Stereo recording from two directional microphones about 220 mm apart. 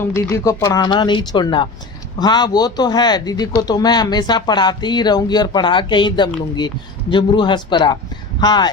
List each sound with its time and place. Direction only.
0.0 s speech: 15° left (ahead or behind)